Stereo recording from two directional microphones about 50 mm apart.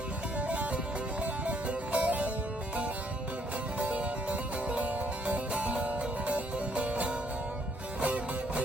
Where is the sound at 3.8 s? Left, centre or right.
Right.